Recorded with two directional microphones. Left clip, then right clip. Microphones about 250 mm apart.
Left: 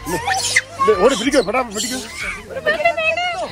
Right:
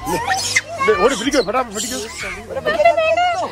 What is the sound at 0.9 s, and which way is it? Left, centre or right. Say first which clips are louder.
Speech: left 1 dB; left.